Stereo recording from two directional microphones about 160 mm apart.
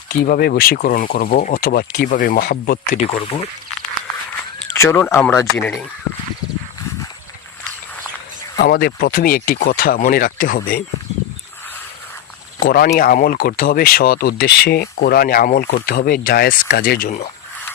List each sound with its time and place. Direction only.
0.1 s speech: 70° left (ahead or behind)
2.9 s speech: 35° left (ahead or behind)
4.7 s speech: 15° left (ahead or behind)
8.5 s speech: 70° left (ahead or behind)
12.5 s speech: 65° left (ahead or behind)